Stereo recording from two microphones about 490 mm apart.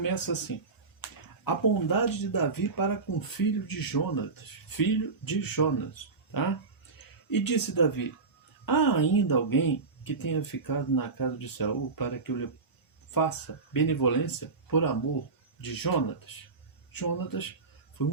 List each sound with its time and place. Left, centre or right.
0.0 s speech: left